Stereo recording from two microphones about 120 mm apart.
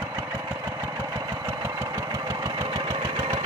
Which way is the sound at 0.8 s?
30° right (ahead or behind).